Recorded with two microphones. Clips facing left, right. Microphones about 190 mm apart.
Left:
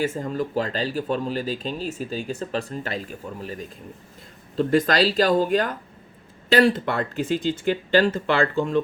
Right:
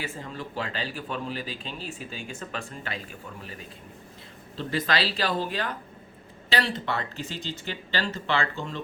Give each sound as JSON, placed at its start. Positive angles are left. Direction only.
{"t": 0.0, "sound": "speech", "side_deg": 45}